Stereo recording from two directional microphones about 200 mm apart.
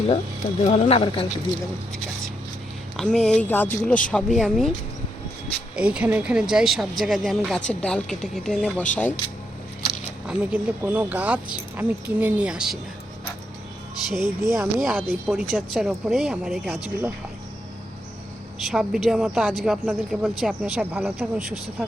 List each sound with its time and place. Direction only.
0.6 s speech: 30° left (ahead or behind)
3.0 s speech: 5° left (ahead or behind)
5.7 s speech: 5° right (ahead or behind)
10.2 s speech: 5° right (ahead or behind)
14.2 s speech: 15° right (ahead or behind)
14.8 s speech: centre (ahead or behind)
18.6 s speech: centre (ahead or behind)